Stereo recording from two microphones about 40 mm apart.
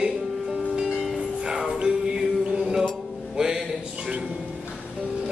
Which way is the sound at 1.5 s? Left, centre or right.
Centre.